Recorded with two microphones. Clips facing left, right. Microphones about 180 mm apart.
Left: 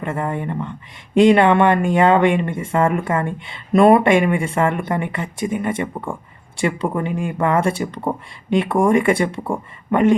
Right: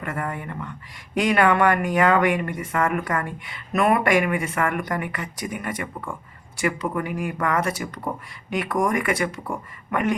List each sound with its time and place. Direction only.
0.0 s speech: 25° left (ahead or behind)